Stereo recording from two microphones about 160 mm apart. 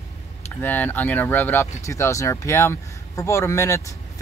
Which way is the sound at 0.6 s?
10° left (ahead or behind).